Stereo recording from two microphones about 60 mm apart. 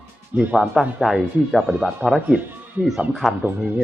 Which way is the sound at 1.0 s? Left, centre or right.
Centre.